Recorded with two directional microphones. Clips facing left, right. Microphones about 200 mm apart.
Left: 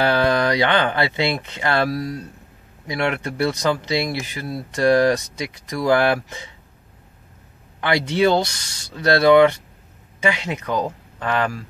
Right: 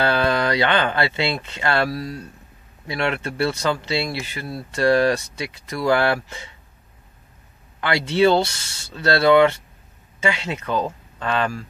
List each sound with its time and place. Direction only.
0.0 s speech: 15° left (ahead or behind)
7.8 s speech: 15° left (ahead or behind)